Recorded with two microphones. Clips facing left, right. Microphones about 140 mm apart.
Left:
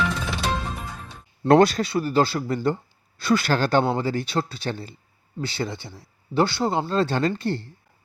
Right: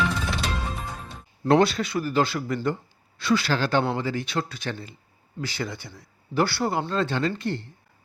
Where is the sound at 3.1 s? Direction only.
45° left (ahead or behind); by 6.8 s 20° left (ahead or behind).